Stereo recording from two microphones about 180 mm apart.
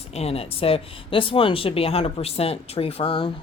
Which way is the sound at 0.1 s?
35° left (ahead or behind).